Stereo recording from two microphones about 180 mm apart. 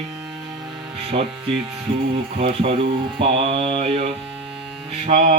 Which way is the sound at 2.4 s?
35° right (ahead or behind).